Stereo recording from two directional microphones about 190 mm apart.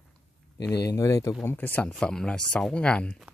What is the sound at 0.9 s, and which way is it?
Speech, 15° left (ahead or behind).